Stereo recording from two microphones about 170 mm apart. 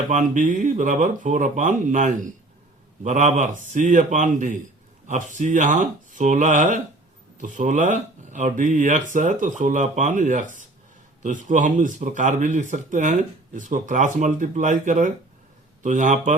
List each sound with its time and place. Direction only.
0.1 s speech: 50° right (ahead or behind)